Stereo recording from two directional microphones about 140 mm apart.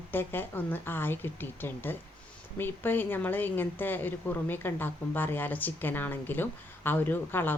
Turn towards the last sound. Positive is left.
turn(degrees=15)  # may be behind; listen again after turning